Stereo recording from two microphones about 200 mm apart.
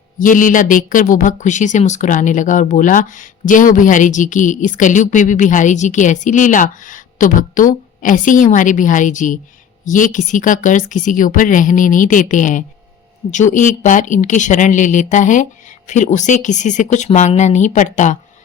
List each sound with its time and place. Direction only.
0.2 s speech: 40° left (ahead or behind)